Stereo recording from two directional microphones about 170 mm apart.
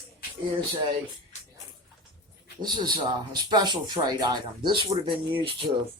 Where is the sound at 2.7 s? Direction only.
25° right (ahead or behind).